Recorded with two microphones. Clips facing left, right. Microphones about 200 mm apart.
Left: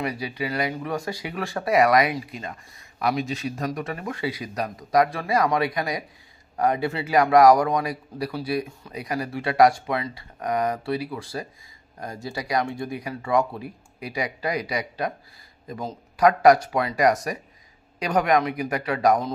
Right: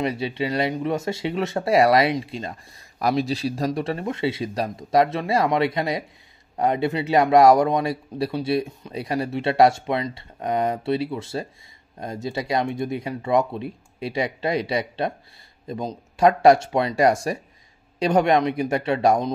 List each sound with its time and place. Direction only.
0.0 s speech: 25° right (ahead or behind)